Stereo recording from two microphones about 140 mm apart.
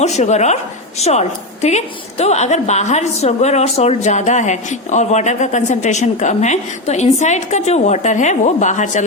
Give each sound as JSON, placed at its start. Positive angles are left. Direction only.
{"t": 0.0, "sound": "a woman's voice", "side_deg": 55}